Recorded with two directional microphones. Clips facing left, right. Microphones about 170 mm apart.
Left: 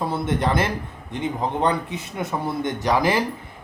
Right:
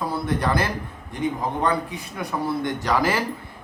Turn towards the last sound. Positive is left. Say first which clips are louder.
# left 2 dB
turn(degrees=15)  # may be behind; listen again after turning